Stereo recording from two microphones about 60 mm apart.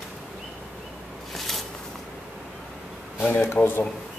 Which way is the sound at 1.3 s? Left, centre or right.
Centre.